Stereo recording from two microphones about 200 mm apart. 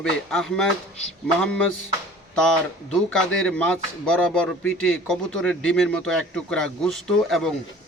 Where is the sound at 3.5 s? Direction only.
5° left (ahead or behind).